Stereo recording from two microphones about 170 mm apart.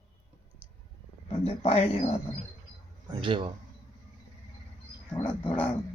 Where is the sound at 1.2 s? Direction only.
35° left (ahead or behind).